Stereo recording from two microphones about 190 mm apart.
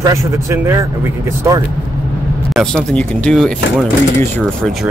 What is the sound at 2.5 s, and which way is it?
Speech, 5° left (ahead or behind).